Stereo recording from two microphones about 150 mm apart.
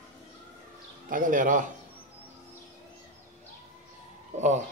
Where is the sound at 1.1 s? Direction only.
65° right (ahead or behind).